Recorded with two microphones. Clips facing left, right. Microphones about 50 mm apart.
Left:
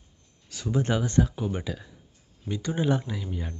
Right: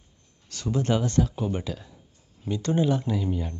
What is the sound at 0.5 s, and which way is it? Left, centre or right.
Speech, centre.